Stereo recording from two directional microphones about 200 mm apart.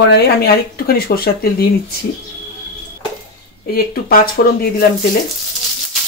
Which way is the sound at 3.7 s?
50° left (ahead or behind).